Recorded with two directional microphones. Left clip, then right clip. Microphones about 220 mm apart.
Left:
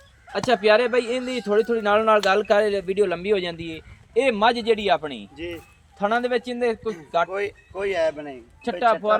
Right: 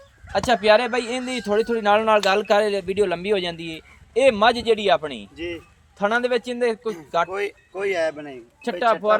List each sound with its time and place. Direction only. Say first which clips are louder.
0.3 s speech: right 1 dB; 45° right (ahead or behind)